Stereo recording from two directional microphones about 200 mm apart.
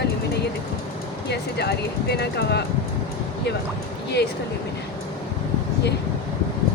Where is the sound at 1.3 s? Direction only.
55° left (ahead or behind).